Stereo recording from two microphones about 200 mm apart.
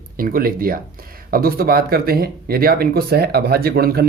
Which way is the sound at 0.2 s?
45° right (ahead or behind).